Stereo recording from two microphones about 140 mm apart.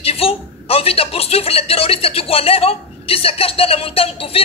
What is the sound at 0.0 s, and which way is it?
A woman's voice, 45° left (ahead or behind).